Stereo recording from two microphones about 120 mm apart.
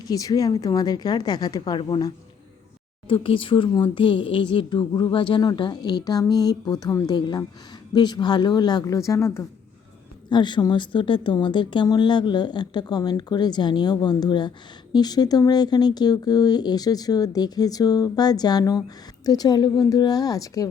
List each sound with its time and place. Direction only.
0.1 s speech: 30° left (ahead or behind)
3.1 s speech: 45° left (ahead or behind); by 9.4 s 25° left (ahead or behind)
10.2 s speech: 40° left (ahead or behind)